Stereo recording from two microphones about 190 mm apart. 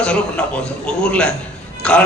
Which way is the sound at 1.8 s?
5° left (ahead or behind).